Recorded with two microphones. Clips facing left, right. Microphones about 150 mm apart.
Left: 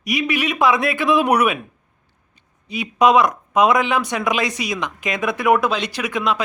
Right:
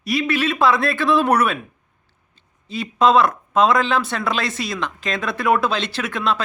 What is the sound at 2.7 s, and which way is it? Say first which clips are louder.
A man's voice: left 1 dB; 15° left (ahead or behind).